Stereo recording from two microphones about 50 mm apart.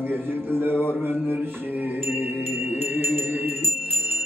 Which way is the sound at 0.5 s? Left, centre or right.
Right.